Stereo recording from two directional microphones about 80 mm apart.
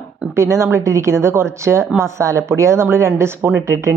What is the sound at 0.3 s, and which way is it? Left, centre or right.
Speech, right.